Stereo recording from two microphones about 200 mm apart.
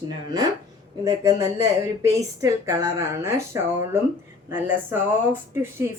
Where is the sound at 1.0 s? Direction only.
15° right (ahead or behind).